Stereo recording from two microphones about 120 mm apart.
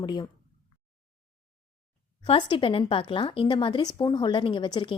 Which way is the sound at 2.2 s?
50° left (ahead or behind).